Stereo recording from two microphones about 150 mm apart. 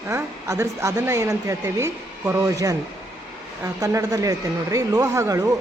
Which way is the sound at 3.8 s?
20° right (ahead or behind).